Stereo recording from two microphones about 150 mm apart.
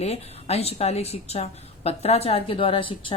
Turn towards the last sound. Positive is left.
turn(degrees=35)  # may be behind; listen again after turning